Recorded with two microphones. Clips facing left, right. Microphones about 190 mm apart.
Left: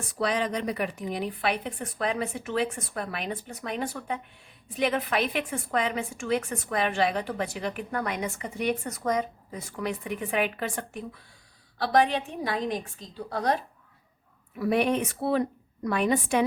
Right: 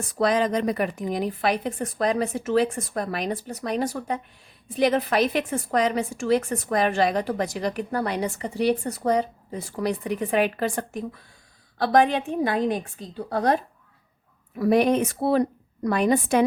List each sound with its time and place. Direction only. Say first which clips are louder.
0.2 s a woman's voice: right 6 dB; 45° right (ahead or behind)
11.8 s a woman's voice: right 4 dB; 50° right (ahead or behind)
14.5 s a woman's voice: right 5 dB; 40° right (ahead or behind)